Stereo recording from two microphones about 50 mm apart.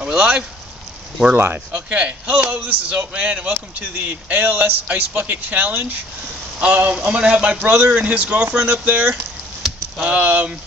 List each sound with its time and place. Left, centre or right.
0.0 s speech: right
1.7 s speech: right
3.9 s speech: right
6.6 s speech: right
7.5 s speech: right